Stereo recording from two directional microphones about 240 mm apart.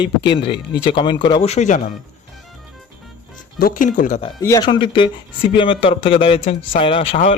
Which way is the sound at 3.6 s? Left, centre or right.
Left.